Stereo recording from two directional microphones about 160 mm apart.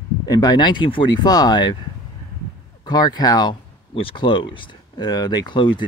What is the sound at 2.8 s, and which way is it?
Speech, 25° left (ahead or behind).